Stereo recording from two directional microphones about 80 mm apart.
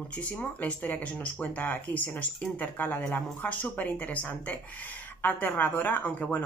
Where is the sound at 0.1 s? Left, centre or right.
Centre.